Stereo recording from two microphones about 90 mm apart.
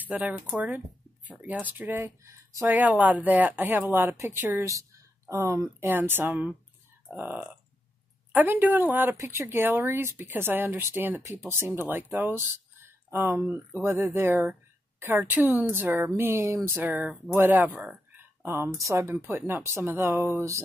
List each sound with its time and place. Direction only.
0.0 s speech: 15° right (ahead or behind); by 20.6 s 30° right (ahead or behind)